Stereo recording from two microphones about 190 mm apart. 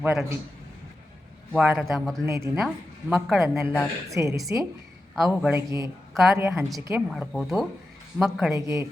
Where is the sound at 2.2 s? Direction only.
15° right (ahead or behind).